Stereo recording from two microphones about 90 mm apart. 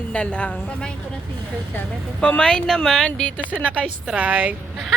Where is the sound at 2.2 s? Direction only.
15° left (ahead or behind).